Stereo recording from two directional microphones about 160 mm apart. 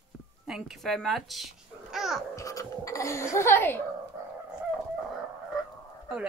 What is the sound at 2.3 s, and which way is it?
Speech, 20° left (ahead or behind).